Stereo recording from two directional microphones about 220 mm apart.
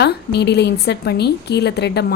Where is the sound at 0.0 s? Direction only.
50° left (ahead or behind).